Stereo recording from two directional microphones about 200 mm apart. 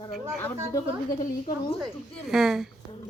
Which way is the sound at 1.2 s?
30° left (ahead or behind).